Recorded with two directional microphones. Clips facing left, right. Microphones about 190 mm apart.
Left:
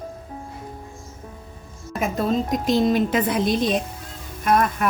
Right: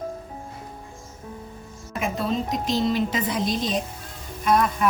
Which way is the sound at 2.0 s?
50° left (ahead or behind).